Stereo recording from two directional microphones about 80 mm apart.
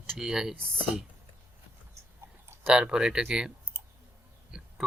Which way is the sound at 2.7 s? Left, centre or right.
Centre.